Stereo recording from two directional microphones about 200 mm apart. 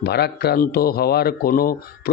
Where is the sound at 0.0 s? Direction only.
55° left (ahead or behind).